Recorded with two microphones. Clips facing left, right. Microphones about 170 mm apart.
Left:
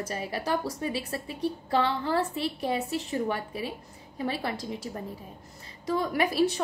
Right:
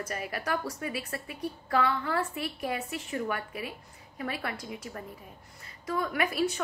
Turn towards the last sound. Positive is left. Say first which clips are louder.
# left 4 dB
turn(degrees=30)  # may be behind; listen again after turning